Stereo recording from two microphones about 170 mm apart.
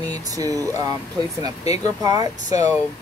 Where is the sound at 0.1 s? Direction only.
20° right (ahead or behind).